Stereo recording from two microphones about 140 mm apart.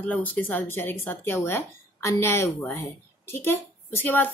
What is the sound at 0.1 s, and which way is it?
A woman's voice, 15° left (ahead or behind).